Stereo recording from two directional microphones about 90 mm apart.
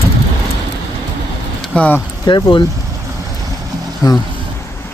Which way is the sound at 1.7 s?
15° left (ahead or behind).